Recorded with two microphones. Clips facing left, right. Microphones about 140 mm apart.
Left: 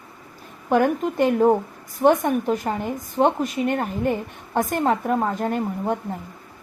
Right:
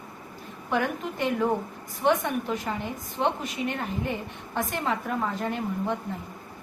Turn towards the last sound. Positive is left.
turn(degrees=45)  # may be behind; listen again after turning